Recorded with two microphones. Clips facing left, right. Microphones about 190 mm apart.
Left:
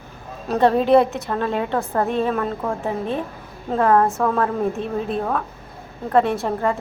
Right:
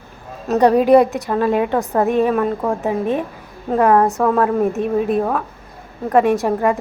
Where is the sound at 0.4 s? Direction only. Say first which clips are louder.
Right 4 dB; 10° right (ahead or behind).